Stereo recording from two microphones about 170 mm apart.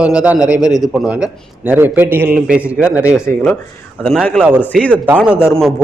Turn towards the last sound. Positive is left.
turn(degrees=0)  # may be behind; listen again after turning